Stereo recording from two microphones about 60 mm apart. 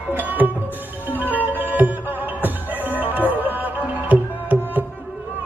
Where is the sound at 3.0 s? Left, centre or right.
Right.